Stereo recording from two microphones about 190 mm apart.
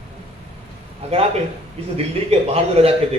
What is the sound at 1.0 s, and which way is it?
Speech, 35° right (ahead or behind).